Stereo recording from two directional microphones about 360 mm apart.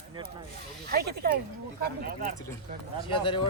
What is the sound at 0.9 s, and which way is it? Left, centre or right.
Speech, right.